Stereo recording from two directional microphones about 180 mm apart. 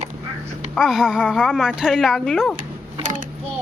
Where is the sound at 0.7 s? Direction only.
5° right (ahead or behind).